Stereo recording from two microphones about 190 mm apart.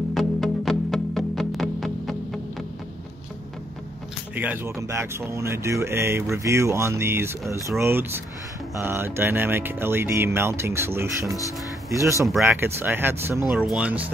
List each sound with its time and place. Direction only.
0.1 s music: centre (ahead or behind)
4.4 s speech: 10° right (ahead or behind)
13.5 s speech: 5° right (ahead or behind)